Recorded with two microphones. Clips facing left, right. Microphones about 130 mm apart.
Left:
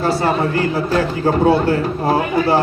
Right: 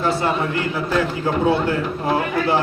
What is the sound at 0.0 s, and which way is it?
A man's voice, 35° left (ahead or behind).